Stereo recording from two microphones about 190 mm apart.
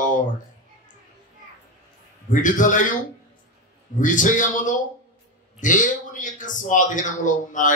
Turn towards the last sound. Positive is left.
turn(degrees=40)  # may be behind; listen again after turning